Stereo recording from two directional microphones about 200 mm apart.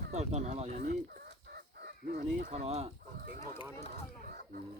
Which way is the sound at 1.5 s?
50° right (ahead or behind).